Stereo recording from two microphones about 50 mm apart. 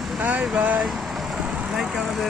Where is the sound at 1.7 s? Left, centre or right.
Centre.